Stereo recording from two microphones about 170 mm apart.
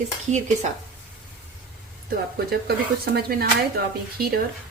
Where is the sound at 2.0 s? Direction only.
65° right (ahead or behind).